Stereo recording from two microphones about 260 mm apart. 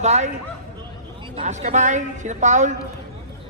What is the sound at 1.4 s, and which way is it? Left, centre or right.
A man's voice, right.